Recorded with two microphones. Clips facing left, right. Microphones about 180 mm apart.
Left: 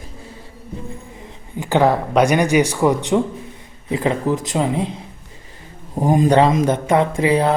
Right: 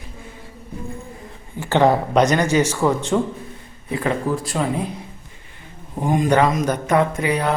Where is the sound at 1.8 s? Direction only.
Centre (ahead or behind); by 4.9 s 20° left (ahead or behind).